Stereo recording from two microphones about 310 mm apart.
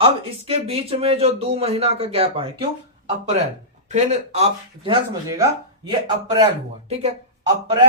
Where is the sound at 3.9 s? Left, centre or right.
Right.